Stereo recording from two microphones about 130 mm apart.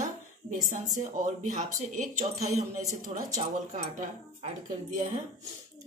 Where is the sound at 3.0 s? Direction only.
90° right.